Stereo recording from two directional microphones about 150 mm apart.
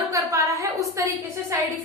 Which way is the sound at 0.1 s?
20° right (ahead or behind).